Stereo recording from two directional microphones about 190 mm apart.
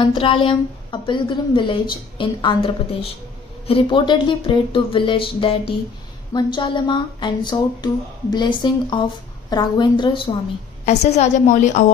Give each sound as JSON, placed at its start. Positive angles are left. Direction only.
{"t": 0.0, "sound": "speech", "side_deg": 25}
{"t": 10.9, "sound": "a woman's voice", "side_deg": 35}